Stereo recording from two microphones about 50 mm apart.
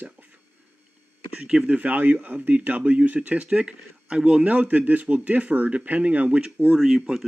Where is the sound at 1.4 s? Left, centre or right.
Centre.